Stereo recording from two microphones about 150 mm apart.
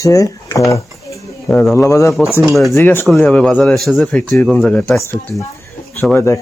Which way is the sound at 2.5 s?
Centre (ahead or behind).